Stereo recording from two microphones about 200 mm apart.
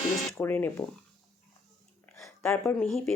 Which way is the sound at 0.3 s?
10° left (ahead or behind).